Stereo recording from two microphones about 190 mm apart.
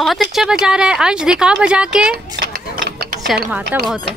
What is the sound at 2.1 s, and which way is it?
Dishes, 55° right (ahead or behind).